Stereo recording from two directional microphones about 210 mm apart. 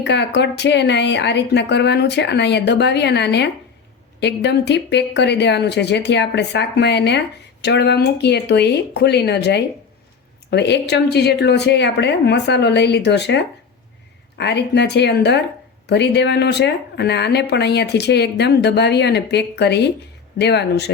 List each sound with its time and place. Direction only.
0.0 s speech: 55° left (ahead or behind)